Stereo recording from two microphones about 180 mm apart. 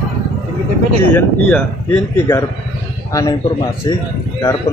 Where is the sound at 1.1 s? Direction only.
15° left (ahead or behind).